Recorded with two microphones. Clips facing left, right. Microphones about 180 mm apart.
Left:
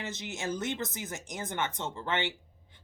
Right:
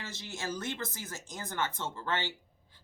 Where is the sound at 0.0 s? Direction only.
20° left (ahead or behind).